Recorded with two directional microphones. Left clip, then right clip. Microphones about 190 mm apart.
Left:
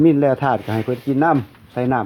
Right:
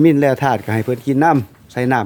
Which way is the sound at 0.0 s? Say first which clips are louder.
Right 2 dB; 25° right (ahead or behind).